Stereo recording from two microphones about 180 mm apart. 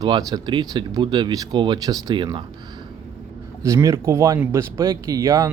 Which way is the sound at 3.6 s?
15° right (ahead or behind).